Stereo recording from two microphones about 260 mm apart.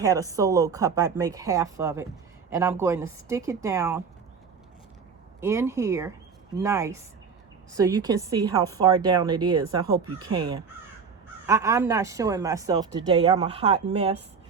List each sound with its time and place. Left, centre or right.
0.0 s speech: centre
5.4 s speech: centre
10.1 s speech: right
10.3 s speech: centre